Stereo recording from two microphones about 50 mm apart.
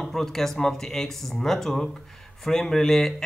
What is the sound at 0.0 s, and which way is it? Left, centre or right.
Speech, centre.